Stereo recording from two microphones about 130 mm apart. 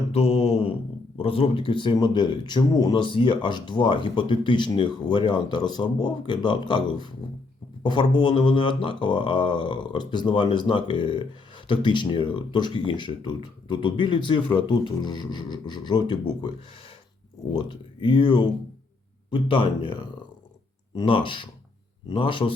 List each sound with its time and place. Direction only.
0.1 s mantra: 50° left (ahead or behind)
1.2 s speech: 45° left (ahead or behind)
17.5 s speech: 40° left (ahead or behind)